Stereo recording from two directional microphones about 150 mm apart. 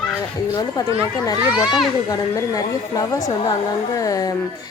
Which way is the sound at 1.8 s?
25° left (ahead or behind).